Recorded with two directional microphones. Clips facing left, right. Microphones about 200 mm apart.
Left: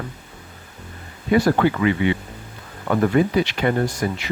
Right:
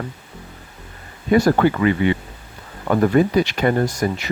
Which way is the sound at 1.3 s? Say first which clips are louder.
Right 2 dB; 40° right (ahead or behind).